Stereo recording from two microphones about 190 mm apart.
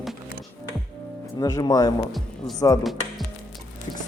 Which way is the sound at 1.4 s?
20° left (ahead or behind).